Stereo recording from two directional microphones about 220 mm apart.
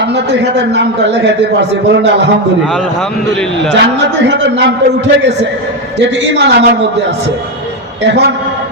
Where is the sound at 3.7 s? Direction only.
55° right (ahead or behind).